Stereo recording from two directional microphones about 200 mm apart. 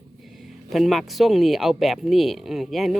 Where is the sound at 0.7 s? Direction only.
Centre (ahead or behind).